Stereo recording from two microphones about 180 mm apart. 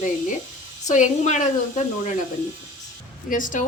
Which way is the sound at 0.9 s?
40° left (ahead or behind).